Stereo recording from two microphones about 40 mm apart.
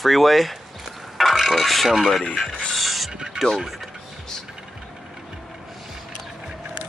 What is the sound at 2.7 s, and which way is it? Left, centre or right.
Mechanisms, centre.